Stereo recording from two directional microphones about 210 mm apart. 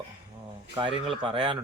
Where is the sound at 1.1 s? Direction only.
25° right (ahead or behind).